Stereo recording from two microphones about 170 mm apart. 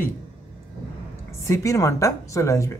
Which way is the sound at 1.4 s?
15° left (ahead or behind).